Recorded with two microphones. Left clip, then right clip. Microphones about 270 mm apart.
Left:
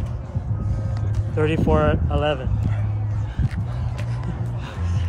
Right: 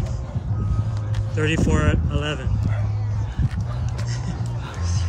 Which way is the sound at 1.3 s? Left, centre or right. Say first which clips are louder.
Left 3 dB; centre.